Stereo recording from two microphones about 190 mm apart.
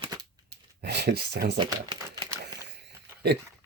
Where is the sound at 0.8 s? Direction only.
60° right (ahead or behind).